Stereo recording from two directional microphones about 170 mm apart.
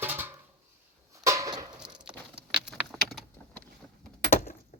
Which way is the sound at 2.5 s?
5° right (ahead or behind).